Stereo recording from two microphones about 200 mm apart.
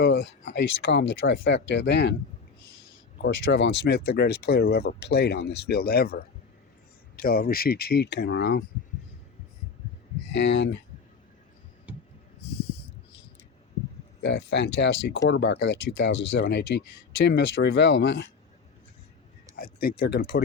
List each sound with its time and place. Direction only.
0.0 s speech: 60° left (ahead or behind)
3.2 s speech: 60° left (ahead or behind)
7.2 s speech: 45° left (ahead or behind)
10.3 s speech: 65° left (ahead or behind)
11.9 s a sound: 5° right (ahead or behind)
14.2 s speech: 60° left (ahead or behind)
19.5 s speech: 50° left (ahead or behind)